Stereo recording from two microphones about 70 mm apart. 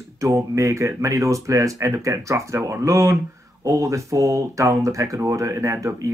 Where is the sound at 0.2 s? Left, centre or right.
Right.